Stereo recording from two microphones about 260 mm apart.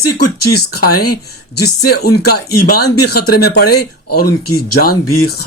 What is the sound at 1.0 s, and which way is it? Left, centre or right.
Speech, left.